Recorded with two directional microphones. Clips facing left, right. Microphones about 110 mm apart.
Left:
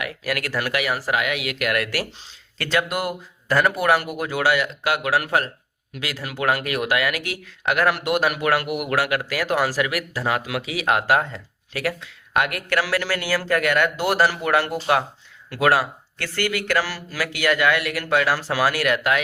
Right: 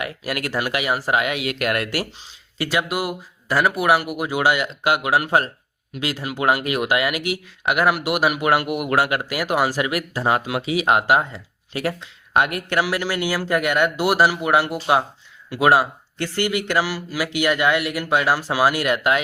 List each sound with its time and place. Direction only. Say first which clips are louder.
0.0 s speech: even; 25° right (ahead or behind)
2.6 s speech: right 1 dB; 10° right (ahead or behind)
8.4 s speech: right 2 dB; 20° right (ahead or behind)
11.8 s speech: right 1 dB; 25° right (ahead or behind)